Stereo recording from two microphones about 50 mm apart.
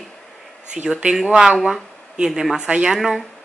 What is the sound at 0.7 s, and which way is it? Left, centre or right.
Speech, right.